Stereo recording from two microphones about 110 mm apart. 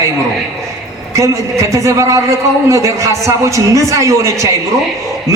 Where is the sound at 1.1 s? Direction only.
25° right (ahead or behind).